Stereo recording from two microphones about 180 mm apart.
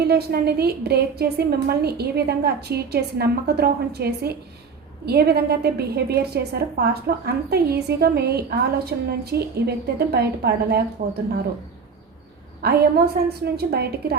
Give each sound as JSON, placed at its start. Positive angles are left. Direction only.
{"t": 0.0, "sound": "a woman's voice", "side_deg": -65}
{"t": 11.0, "sound": "speech", "side_deg": -45}
{"t": 12.6, "sound": "a woman's voice", "side_deg": -60}